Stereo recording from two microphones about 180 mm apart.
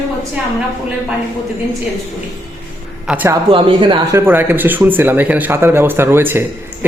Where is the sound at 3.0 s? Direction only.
10° right (ahead or behind).